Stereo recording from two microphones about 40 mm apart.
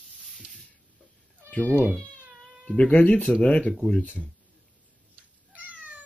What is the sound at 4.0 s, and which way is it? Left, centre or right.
Speech, left.